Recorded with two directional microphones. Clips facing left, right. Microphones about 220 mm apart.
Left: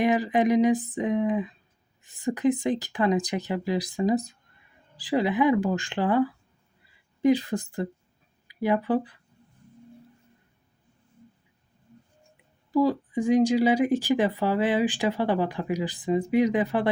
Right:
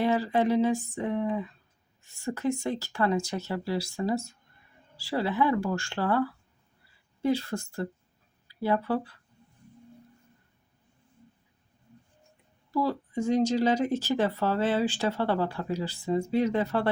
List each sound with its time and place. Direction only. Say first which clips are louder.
0.0 s speech: left 3 dB; 15° left (ahead or behind)
12.7 s speech: left 5 dB; 15° left (ahead or behind)